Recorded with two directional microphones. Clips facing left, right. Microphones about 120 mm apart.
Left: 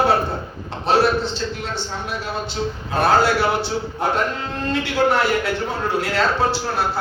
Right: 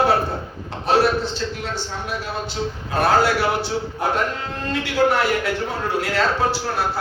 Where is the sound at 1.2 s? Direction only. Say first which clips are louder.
Left 1 dB; 25° left (ahead or behind).